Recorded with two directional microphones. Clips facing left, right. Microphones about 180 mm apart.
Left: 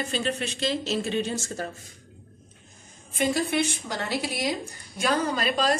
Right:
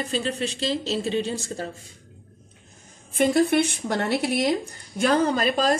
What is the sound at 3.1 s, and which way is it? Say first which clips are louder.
Speech: right 5 dB; 60° right (ahead or behind).